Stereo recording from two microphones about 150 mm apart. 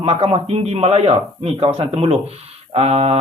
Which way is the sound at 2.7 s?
40° right (ahead or behind).